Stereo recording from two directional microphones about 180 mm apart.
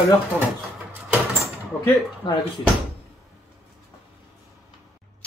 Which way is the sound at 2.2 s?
25° left (ahead or behind).